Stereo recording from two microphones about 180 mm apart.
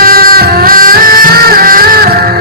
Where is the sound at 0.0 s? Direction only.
50° right (ahead or behind).